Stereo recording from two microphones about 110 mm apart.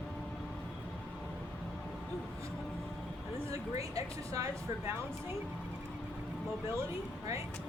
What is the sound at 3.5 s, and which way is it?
Speech, 30° right (ahead or behind).